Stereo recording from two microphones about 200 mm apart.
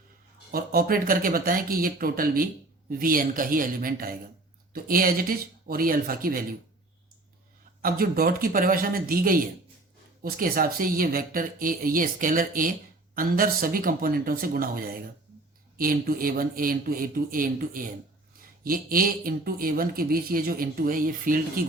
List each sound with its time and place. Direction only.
0.5 s speech: 50° right (ahead or behind)
7.8 s speech: 45° right (ahead or behind)